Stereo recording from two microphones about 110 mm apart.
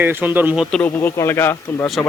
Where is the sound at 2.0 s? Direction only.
10° left (ahead or behind).